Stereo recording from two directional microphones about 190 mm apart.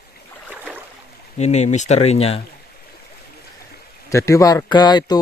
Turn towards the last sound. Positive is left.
turn(degrees=20)  # may be behind; listen again after turning